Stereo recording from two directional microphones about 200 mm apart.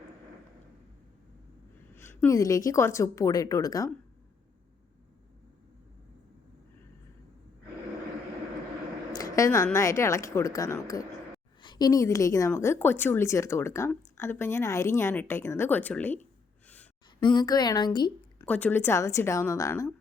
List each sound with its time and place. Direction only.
2.0 s a woman's voice: 15° left (ahead or behind)
9.1 s a woman's voice: 15° left (ahead or behind)
16.6 s sigh: 5° left (ahead or behind)
17.2 s a woman's voice: 20° left (ahead or behind)
18.4 s a woman's voice: 5° left (ahead or behind)